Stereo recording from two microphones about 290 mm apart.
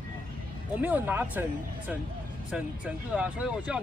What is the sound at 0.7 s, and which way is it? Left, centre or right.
Speech, centre.